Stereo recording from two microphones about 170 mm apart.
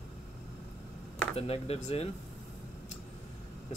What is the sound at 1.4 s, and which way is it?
Speech, 35° left (ahead or behind).